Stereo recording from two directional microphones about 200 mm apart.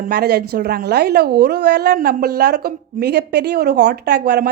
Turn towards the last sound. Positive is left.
turn(degrees=-55)  # may be behind; listen again after turning